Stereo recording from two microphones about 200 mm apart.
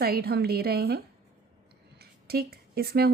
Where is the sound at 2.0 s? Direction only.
50° right (ahead or behind).